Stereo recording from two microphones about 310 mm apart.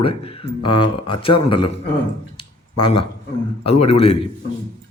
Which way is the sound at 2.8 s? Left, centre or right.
Centre.